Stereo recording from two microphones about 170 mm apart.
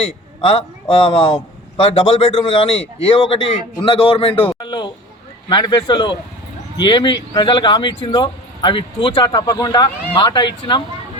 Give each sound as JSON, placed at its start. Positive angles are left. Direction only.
{"t": 0.9, "sound": "a man's voice", "side_deg": 30}